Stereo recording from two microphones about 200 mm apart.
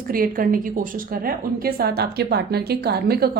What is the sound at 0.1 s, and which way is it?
A woman's voice, 45° right (ahead or behind).